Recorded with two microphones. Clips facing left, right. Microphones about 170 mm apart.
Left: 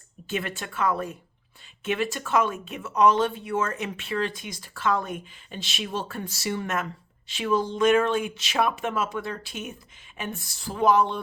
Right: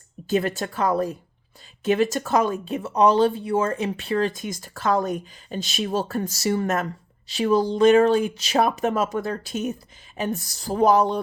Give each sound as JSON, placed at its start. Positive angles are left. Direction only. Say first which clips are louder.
{"t": 0.3, "sound": "speech", "louder": "right 8 dB", "side_deg": -40}